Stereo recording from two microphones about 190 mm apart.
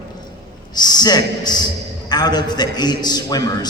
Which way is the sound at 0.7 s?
20° left (ahead or behind).